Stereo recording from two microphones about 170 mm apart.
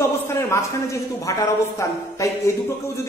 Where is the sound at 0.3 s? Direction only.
15° left (ahead or behind).